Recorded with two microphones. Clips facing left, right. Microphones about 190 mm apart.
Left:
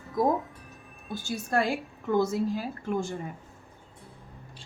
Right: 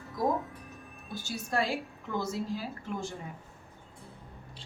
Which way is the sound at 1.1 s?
55° left (ahead or behind).